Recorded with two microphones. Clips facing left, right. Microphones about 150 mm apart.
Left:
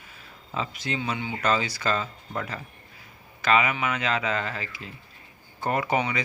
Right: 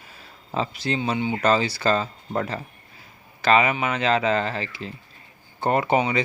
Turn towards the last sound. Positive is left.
turn(degrees=-25)  # may be behind; listen again after turning